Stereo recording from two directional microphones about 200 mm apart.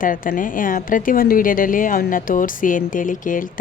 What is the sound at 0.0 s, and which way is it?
A woman's voice, 40° left (ahead or behind).